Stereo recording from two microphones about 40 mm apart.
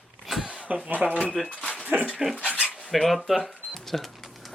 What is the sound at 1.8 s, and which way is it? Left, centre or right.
Speech, right.